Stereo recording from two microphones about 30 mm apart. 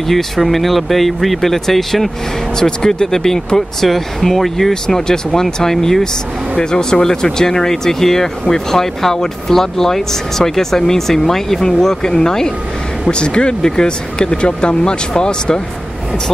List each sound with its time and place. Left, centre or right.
0.1 s speech: centre
2.6 s speech: left
4.8 s speech: left
13.1 s speech: left